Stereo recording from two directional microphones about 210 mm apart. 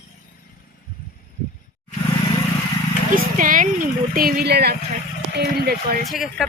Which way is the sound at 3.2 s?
40° right (ahead or behind).